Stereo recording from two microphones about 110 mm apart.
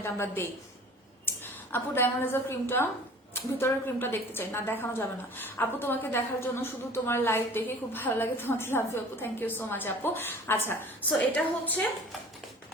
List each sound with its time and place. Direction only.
0.0 s a woman's voice: 20° left (ahead or behind)
1.3 s a sound: 20° left (ahead or behind)
1.7 s a woman's voice: 20° left (ahead or behind)